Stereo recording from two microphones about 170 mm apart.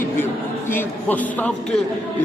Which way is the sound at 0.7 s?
10° left (ahead or behind).